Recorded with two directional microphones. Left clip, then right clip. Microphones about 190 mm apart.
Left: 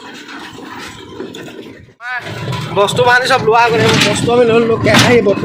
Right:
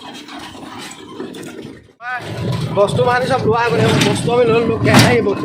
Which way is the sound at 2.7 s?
5° left (ahead or behind).